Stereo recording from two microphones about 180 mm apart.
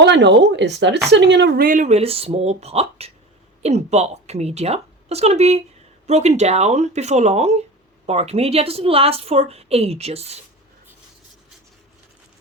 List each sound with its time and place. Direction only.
0.0 s a woman's voice: 75° right (ahead or behind); by 10.3 s 35° right (ahead or behind)